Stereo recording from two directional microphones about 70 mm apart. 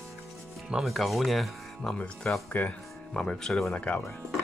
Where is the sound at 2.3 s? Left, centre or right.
Centre.